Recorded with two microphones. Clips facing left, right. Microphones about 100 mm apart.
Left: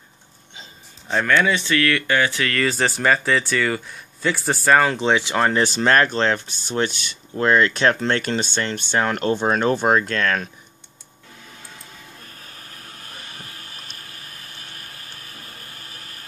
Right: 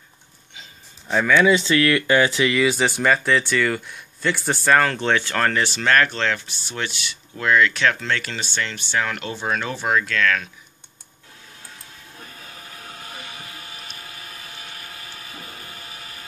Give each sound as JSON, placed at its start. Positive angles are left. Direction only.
{"t": 1.0, "sound": "speech", "side_deg": -5}
{"t": 1.5, "sound": "speech", "side_deg": -20}
{"t": 5.8, "sound": "speech", "side_deg": 30}